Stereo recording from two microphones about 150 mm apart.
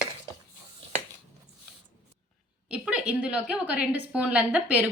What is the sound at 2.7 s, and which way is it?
A woman's voice, 5° right (ahead or behind).